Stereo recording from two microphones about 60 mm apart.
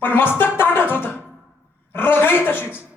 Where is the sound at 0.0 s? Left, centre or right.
Left.